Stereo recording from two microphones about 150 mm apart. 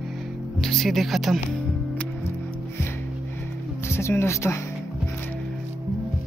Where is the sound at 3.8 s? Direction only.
15° left (ahead or behind).